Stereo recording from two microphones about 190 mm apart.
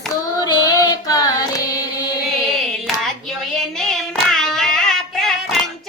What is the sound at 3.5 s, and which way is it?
Child singing, 5° left (ahead or behind).